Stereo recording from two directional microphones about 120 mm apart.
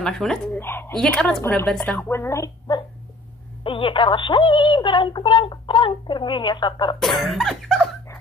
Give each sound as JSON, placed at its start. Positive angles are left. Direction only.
{"t": 0.0, "sound": "cough", "side_deg": 5}
{"t": 0.6, "sound": "a woman's voice", "side_deg": 20}
{"t": 0.9, "sound": "cough", "side_deg": 5}
{"t": 1.7, "sound": "a woman's voice", "side_deg": 10}
{"t": 3.6, "sound": "speech", "side_deg": 45}
{"t": 7.0, "sound": "cough", "side_deg": 0}